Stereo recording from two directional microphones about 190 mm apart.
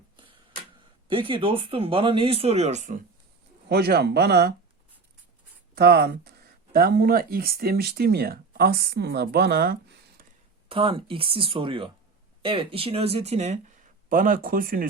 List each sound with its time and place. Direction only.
1.0 s speech: 25° right (ahead or behind)
3.7 s speech: 55° right (ahead or behind)
5.7 s speech: 55° right (ahead or behind)
10.7 s speech: 25° right (ahead or behind)
14.1 s speech: 45° right (ahead or behind)